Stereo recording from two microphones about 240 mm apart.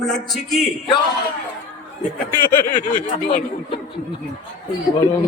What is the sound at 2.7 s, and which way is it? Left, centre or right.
Speech, left.